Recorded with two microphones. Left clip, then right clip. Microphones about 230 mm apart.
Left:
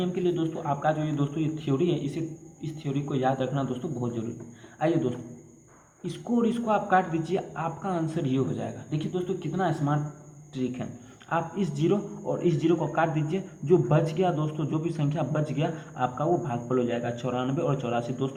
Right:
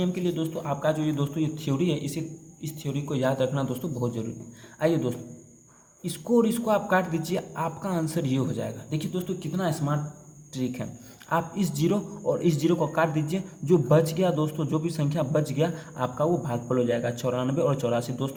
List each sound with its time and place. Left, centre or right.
0.0 s a man's voice: right